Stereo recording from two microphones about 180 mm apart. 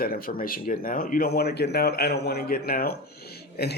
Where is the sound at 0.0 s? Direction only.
55° left (ahead or behind).